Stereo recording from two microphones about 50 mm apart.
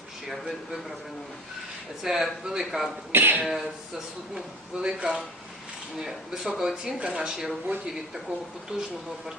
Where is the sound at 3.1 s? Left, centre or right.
Right.